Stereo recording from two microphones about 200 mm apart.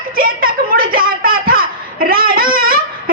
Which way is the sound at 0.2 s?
45° right (ahead or behind).